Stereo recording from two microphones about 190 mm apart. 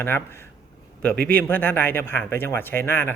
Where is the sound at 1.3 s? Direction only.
10° left (ahead or behind).